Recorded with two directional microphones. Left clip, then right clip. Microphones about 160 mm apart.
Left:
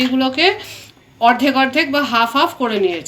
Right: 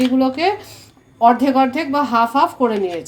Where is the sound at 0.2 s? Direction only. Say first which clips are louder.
Left 2 dB; 45° right (ahead or behind).